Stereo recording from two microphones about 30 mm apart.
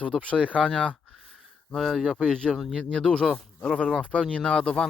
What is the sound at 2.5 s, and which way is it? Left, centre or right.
Speech, centre.